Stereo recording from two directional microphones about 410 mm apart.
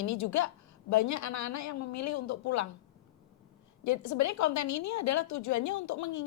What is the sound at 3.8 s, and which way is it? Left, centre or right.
A woman's voice, left.